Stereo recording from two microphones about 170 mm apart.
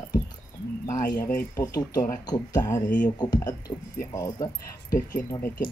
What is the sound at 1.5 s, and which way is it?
Speech, 20° left (ahead or behind).